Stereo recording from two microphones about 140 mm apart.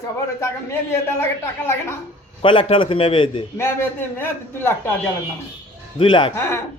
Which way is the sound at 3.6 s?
15° left (ahead or behind).